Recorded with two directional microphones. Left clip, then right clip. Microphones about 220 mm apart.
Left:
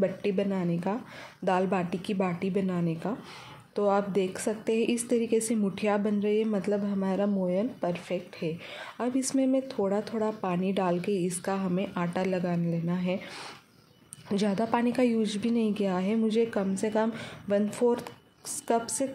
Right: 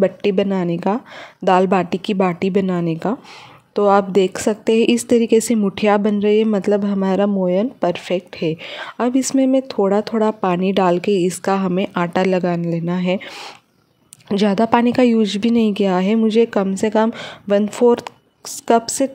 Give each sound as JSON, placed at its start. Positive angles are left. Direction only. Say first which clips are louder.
{"t": 0.0, "sound": "a woman's voice", "louder": "right 11 dB", "side_deg": -35}